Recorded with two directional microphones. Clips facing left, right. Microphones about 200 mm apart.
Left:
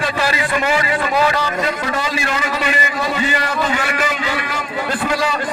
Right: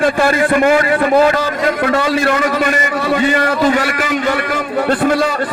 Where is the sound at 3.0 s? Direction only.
60° right (ahead or behind).